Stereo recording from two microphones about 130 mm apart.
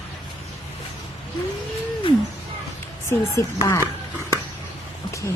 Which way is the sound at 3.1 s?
20° left (ahead or behind).